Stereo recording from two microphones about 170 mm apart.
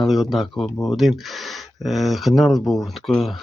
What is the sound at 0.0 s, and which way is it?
Speech, centre (ahead or behind).